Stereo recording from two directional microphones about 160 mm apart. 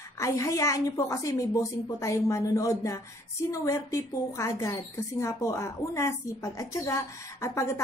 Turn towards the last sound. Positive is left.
turn(degrees=15)  # may be behind; listen again after turning